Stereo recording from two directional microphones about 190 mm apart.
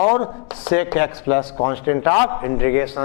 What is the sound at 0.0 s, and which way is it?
A man's voice, 20° left (ahead or behind).